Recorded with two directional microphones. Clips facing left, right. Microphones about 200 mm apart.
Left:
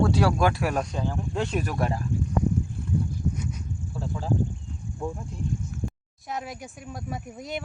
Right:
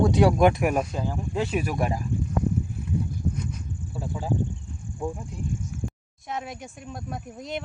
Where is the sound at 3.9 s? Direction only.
10° right (ahead or behind).